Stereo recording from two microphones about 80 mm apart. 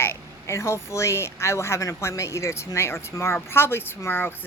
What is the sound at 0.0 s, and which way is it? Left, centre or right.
Speech, left.